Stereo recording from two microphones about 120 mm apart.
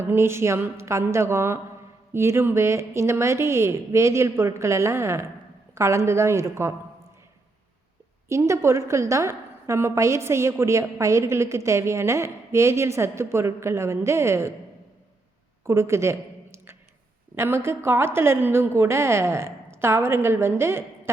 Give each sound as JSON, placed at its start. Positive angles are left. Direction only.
{"t": 0.0, "sound": "a woman's voice", "side_deg": -20}
{"t": 8.3, "sound": "a woman's voice", "side_deg": -25}
{"t": 15.6, "sound": "a woman's voice", "side_deg": -20}
{"t": 17.3, "sound": "a woman's voice", "side_deg": -20}